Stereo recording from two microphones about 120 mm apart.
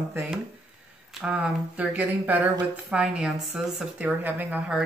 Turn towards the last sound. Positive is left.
turn(degrees=-10)  # may be behind; listen again after turning